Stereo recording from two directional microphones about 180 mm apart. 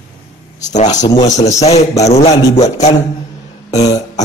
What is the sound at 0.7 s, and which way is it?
Speech, 40° left (ahead or behind).